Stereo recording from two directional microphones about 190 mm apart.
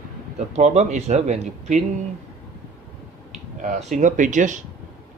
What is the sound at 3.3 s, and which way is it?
Speech, 40° right (ahead or behind).